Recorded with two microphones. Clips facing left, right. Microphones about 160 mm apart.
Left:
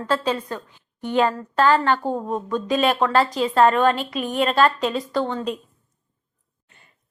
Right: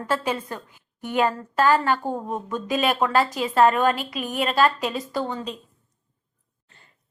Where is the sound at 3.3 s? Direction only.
40° left (ahead or behind).